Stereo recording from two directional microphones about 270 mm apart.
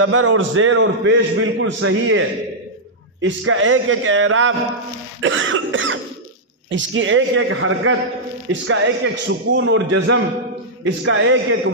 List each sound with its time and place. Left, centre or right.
0.0 s a man's voice: right